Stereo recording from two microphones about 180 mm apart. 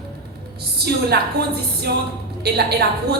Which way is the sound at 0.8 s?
60° right (ahead or behind).